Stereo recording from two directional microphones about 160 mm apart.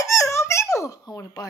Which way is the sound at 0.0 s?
20° left (ahead or behind).